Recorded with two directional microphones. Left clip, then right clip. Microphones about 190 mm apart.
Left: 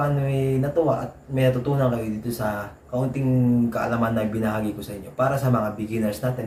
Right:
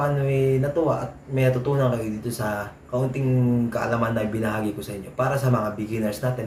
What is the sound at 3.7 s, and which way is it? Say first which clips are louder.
Speech: even; 20° right (ahead or behind).